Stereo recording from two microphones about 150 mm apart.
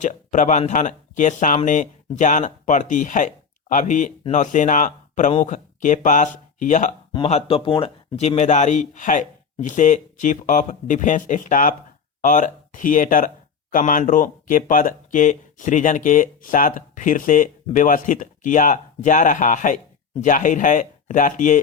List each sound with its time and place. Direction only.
0.0 s speech: 55° left (ahead or behind)
7.3 s speech: 45° left (ahead or behind)